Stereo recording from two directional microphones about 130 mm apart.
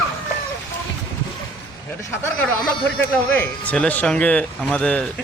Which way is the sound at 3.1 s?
10° left (ahead or behind).